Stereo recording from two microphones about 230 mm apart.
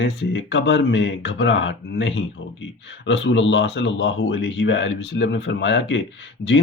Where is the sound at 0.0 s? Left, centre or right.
Left.